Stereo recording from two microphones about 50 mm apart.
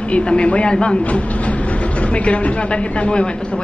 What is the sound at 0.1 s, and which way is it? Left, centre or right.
A man's voice, left.